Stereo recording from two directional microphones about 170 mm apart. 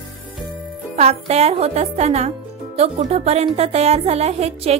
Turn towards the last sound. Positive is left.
turn(degrees=-40)  # may be behind; listen again after turning